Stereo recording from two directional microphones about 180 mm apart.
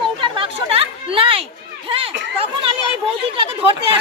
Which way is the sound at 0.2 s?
30° right (ahead or behind).